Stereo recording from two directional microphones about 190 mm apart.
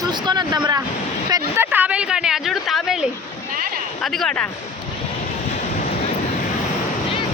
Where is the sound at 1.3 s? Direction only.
10° right (ahead or behind).